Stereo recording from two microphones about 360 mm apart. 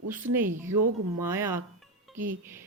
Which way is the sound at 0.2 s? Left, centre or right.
Right.